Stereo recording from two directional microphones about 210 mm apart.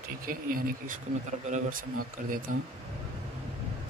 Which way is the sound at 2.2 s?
40° right (ahead or behind).